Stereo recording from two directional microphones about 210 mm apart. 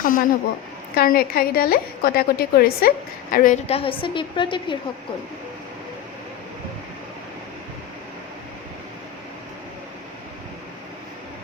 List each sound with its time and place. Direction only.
0.0 s a woman's voice: 40° left (ahead or behind)
3.3 s a woman's voice: 35° left (ahead or behind)